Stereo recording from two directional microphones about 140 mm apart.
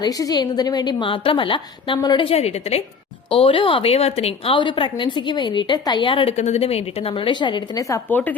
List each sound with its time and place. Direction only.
0.0 s a woman's voice: 25° left (ahead or behind)
6.3 s a woman's voice: 50° left (ahead or behind); by 8.0 s 25° left (ahead or behind)
8.1 s speech: 10° left (ahead or behind)